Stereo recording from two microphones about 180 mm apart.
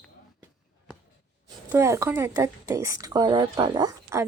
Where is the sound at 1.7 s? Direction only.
15° right (ahead or behind).